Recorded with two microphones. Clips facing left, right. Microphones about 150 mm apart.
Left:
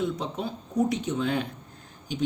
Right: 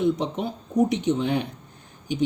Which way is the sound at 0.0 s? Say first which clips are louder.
Right 6 dB; 20° right (ahead or behind).